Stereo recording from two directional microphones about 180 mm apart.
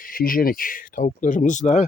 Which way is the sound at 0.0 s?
50° left (ahead or behind).